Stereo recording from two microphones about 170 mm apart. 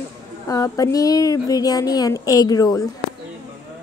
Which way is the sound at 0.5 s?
20° left (ahead or behind).